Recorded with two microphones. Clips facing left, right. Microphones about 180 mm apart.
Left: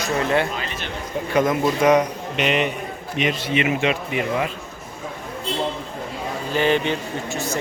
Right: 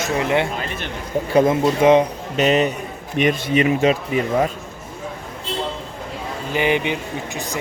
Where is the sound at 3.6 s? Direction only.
35° right (ahead or behind).